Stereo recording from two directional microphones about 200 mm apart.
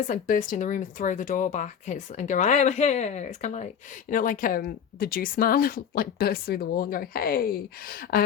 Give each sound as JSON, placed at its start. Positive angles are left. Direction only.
{"t": 0.1, "sound": "speech", "side_deg": 40}